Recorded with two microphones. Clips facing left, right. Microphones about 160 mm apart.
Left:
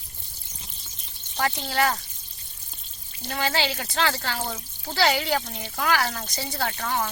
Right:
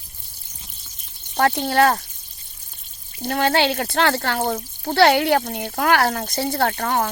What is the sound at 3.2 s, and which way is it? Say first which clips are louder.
Speech: right 7 dB; 60° right (ahead or behind).